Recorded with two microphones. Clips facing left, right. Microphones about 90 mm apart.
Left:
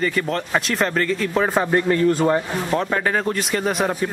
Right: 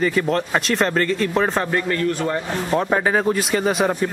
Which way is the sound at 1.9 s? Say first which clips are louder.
Left 4 dB; 20° left (ahead or behind).